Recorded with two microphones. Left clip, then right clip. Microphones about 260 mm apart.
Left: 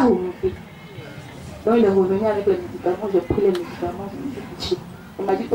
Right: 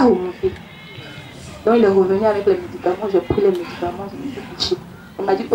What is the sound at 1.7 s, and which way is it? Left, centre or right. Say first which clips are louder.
Speech: right 3 dB; right.